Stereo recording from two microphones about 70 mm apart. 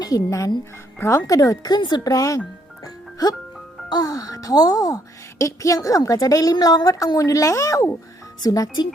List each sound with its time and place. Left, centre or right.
0.0 s a woman's voice: left
0.9 s speech: left
1.3 s speech: left
2.8 s music: left
3.8 s speech: left
5.4 s a woman's voice: left